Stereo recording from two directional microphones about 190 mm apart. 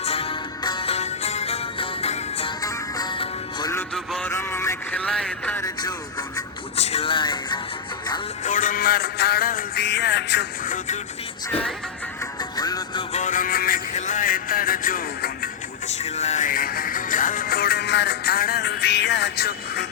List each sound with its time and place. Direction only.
0.0 s music: 30° left (ahead or behind)
2.6 s music: 20° left (ahead or behind)
3.8 s a sound: 5° left (ahead or behind)
5.6 s music: 20° left (ahead or behind)
6.7 s music: 35° left (ahead or behind)
8.4 s music: 45° left (ahead or behind); by 10.4 s 65° left (ahead or behind)
10.7 s speech: 40° left (ahead or behind)
12.4 s music: 20° left (ahead or behind)
13.1 s a sound: 40° left (ahead or behind)
16.0 s music: 35° left (ahead or behind); by 19.9 s 60° left (ahead or behind)